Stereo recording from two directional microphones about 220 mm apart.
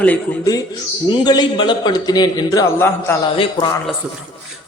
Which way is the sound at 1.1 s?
20° left (ahead or behind).